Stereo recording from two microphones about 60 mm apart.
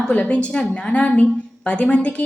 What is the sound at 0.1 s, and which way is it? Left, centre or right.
A woman's voice, left.